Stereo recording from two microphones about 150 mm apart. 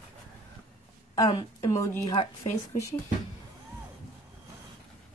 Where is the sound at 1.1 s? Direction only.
25° left (ahead or behind).